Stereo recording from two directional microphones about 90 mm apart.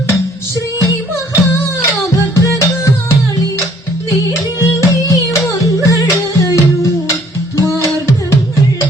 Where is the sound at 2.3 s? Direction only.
35° left (ahead or behind).